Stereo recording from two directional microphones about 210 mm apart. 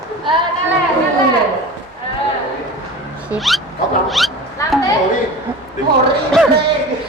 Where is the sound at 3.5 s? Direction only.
Centre (ahead or behind).